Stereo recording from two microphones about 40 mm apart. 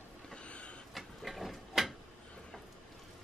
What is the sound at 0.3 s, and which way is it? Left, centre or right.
Vehicle, left.